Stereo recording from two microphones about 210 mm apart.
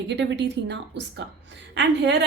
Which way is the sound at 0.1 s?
55° right (ahead or behind).